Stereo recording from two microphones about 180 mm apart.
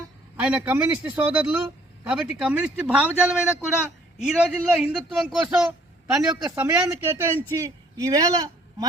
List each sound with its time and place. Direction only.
0.3 s a man's voice: 10° right (ahead or behind)
6.4 s a man's voice: 15° right (ahead or behind)